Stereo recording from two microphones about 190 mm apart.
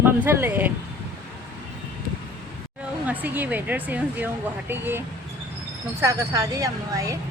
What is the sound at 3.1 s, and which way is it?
Speech, 10° right (ahead or behind).